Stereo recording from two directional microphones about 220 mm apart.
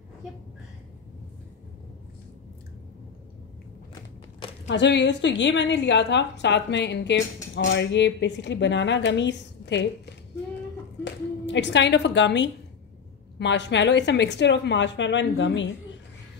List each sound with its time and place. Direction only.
4.6 s a woman's voice: 55° left (ahead or behind)
11.1 s a woman's voice: 55° left (ahead or behind)